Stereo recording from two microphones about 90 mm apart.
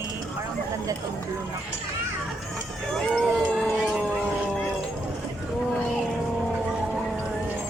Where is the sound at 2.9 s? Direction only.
5° left (ahead or behind).